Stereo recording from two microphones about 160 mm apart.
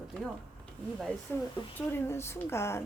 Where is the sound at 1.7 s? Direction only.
15° left (ahead or behind).